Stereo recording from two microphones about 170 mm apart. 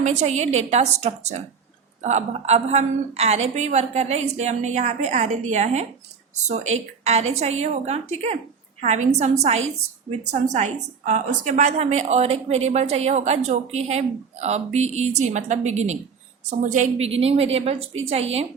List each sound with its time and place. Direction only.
0.0 s a woman's voice: 40° right (ahead or behind)